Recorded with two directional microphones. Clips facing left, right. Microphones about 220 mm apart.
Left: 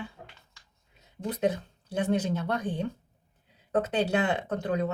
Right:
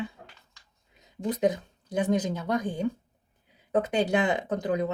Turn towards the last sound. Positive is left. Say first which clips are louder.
# right 1 dB
turn(degrees=-15)  # may be behind; listen again after turning